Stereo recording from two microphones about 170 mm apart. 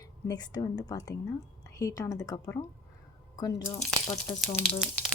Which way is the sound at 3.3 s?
25° left (ahead or behind).